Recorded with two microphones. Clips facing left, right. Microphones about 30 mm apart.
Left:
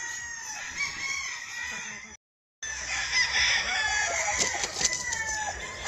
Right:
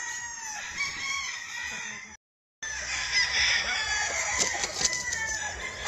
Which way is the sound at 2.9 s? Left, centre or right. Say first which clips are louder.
Left 1 dB; centre.